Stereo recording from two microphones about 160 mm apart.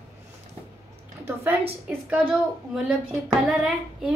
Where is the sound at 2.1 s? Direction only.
5° right (ahead or behind).